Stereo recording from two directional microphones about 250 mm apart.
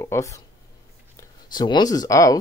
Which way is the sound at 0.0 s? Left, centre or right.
Centre.